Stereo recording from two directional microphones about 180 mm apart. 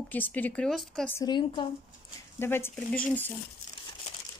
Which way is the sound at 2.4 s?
15° left (ahead or behind).